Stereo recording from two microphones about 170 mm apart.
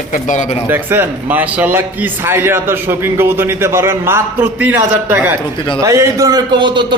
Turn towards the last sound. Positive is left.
turn(degrees=-25)  # may be behind; listen again after turning